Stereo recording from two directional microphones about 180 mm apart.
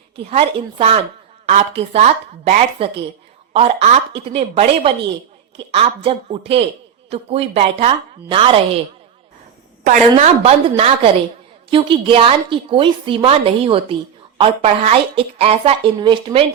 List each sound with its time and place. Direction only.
0.3 s a woman's voice: 35° right (ahead or behind)
10.2 s a woman's voice: 35° right (ahead or behind)